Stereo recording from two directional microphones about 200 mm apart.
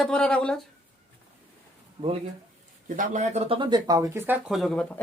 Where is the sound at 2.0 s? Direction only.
25° right (ahead or behind).